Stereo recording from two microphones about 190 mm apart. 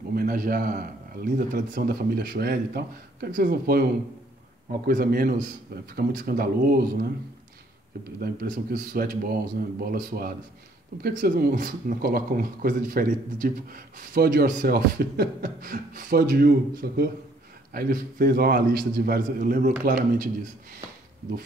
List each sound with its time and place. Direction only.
0.1 s a man's voice: 50° right (ahead or behind)
4.8 s a man's voice: 50° right (ahead or behind)
8.2 s a man's voice: 55° right (ahead or behind)